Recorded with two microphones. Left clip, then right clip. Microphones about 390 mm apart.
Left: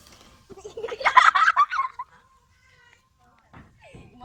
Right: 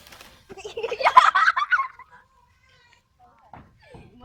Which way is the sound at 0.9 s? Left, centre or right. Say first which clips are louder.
Right 1 dB; centre.